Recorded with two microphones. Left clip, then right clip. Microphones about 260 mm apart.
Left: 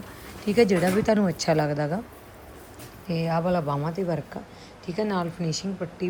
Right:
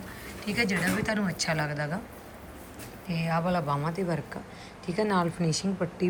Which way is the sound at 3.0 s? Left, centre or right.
Centre.